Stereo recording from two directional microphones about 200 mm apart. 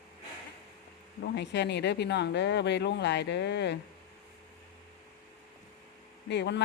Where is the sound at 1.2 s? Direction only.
60° left (ahead or behind).